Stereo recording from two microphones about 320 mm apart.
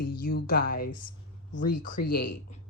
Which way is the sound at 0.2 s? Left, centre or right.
Left.